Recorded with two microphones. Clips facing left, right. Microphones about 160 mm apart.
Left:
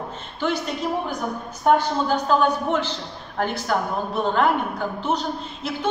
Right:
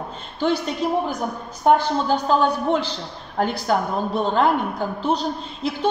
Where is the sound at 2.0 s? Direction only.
35° right (ahead or behind).